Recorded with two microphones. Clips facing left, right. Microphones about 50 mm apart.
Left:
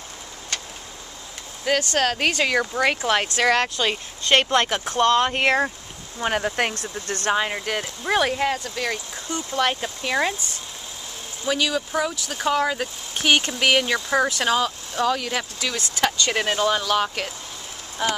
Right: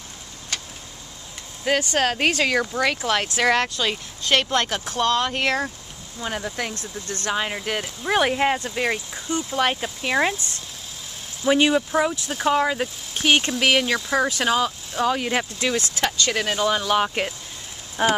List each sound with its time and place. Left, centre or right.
1.6 s speech: centre
3.3 s speech: centre
3.7 s speech: centre
6.1 s speech: left
7.3 s speech: centre
8.2 s speech: centre
9.1 s speech: centre
11.4 s speech: right
11.9 s speech: centre
15.1 s speech: right
15.9 s speech: centre
16.8 s speech: centre
18.0 s speech: right